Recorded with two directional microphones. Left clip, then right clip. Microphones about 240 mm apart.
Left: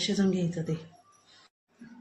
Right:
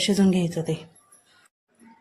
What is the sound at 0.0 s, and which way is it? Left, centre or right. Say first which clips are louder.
Speech: right 6 dB; right.